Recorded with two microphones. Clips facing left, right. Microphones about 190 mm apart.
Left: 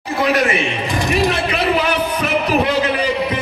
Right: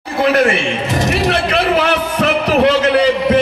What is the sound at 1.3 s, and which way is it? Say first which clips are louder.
Speech: right 3 dB; 75° right (ahead or behind).